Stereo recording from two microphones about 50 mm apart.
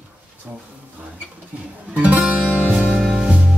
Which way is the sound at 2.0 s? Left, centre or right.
Right.